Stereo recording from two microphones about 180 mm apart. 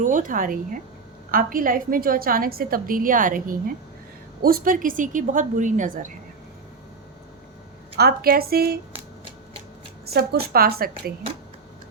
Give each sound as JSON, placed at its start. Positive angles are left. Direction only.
{"t": 0.0, "sound": "a woman's voice", "side_deg": -45}
{"t": 7.9, "sound": "a woman's voice", "side_deg": -60}
{"t": 10.1, "sound": "a woman's voice", "side_deg": -60}